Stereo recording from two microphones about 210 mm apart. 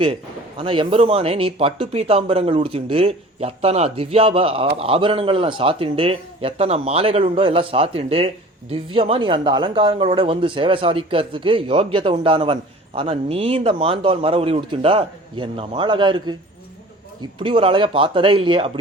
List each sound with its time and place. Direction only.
0.6 s speech: 25° right (ahead or behind)